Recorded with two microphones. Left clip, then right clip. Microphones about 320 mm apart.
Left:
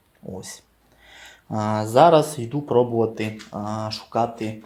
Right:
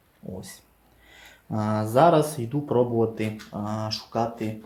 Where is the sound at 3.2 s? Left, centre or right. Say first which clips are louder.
Left 2 dB; centre.